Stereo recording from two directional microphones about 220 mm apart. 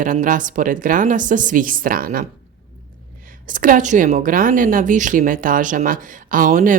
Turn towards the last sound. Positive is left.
turn(degrees=-35)  # may be behind; listen again after turning